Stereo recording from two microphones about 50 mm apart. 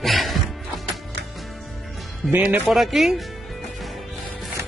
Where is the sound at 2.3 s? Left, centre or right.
Right.